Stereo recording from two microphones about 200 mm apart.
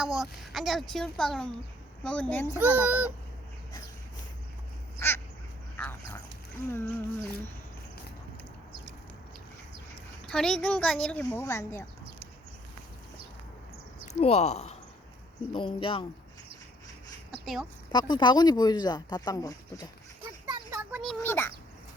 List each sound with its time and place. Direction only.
0.2 s speech: centre (ahead or behind)
2.6 s a child's voice: 10° right (ahead or behind)
4.9 s duck: 10° left (ahead or behind)
6.7 s speech: 15° left (ahead or behind)
10.2 s speech: 5° left (ahead or behind)
14.1 s speech: 30° left (ahead or behind)
17.4 s a woman's voice: centre (ahead or behind)
17.9 s speech: 20° left (ahead or behind)
20.5 s a sound: 20° right (ahead or behind)
21.0 s a child's voice: 5° left (ahead or behind)